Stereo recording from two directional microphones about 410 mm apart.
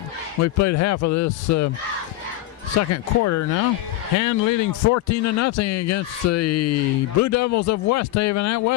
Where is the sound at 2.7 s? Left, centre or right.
Left.